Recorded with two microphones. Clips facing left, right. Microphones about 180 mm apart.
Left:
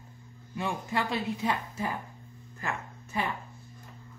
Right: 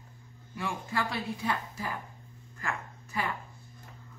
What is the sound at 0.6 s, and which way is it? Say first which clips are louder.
Speech: left 2 dB; 20° left (ahead or behind).